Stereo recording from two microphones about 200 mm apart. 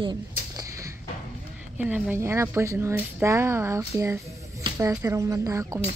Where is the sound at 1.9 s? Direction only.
10° right (ahead or behind).